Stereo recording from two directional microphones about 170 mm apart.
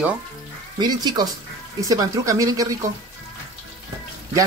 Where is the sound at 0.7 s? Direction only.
25° right (ahead or behind).